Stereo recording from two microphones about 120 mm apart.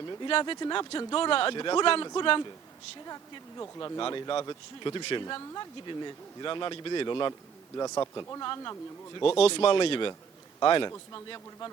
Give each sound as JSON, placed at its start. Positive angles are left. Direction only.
{"t": 0.0, "sound": "a sound", "side_deg": 30}
{"t": 0.3, "sound": "speech", "side_deg": 45}
{"t": 3.6, "sound": "speech", "side_deg": 30}
{"t": 4.0, "sound": "speech", "side_deg": 45}
{"t": 7.8, "sound": "speech", "side_deg": 25}
{"t": 9.4, "sound": "speech", "side_deg": 50}